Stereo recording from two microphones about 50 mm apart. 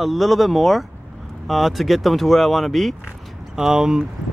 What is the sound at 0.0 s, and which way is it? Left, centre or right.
Speech, centre.